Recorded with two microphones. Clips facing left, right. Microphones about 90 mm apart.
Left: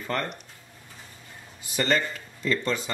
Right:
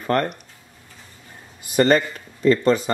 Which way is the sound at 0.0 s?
55° right (ahead or behind).